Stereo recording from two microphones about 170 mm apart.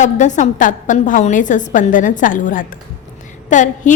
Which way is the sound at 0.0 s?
45° left (ahead or behind).